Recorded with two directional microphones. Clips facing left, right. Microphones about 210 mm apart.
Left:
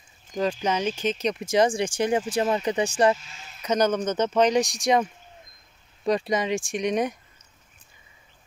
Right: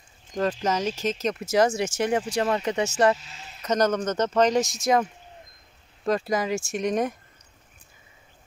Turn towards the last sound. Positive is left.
turn(degrees=0)  # may be behind; listen again after turning